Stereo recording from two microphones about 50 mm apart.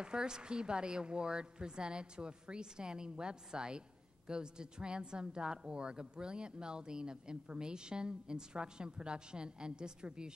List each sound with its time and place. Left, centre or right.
0.0 s a woman's voice: centre